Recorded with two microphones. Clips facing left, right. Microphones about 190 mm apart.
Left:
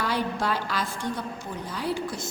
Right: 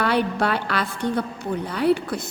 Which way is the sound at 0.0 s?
65° right (ahead or behind).